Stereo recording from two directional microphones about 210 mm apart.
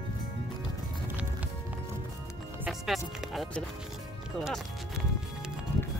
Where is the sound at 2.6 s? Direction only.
Centre (ahead or behind).